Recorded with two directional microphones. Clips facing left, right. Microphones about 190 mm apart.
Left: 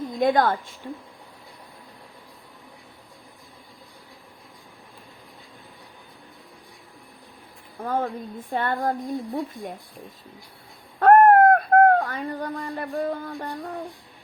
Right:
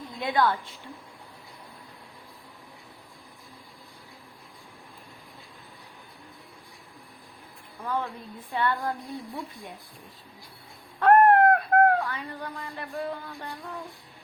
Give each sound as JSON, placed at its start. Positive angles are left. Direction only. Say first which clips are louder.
{"t": 0.2, "sound": "speech", "louder": "left 5 dB", "side_deg": 45}
{"t": 7.8, "sound": "speech", "louder": "left 5 dB", "side_deg": 45}
{"t": 11.0, "sound": "a sound", "louder": "left 4 dB", "side_deg": 45}